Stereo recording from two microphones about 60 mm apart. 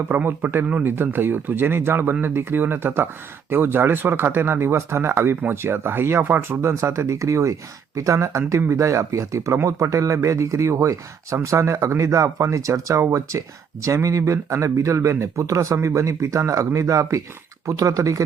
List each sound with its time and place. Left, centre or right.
0.1 s speech: right